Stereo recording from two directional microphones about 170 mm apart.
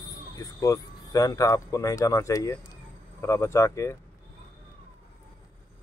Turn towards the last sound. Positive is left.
turn(degrees=15)  # may be behind; listen again after turning